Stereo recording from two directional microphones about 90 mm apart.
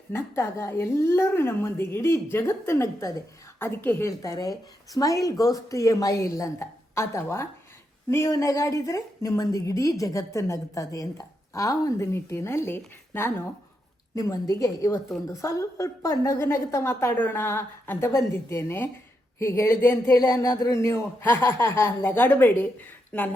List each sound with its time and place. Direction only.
0.1 s a man's voice: 30° left (ahead or behind)
3.6 s a woman's voice: 25° left (ahead or behind)
14.2 s a woman's voice: 35° left (ahead or behind); by 23.3 s 20° left (ahead or behind)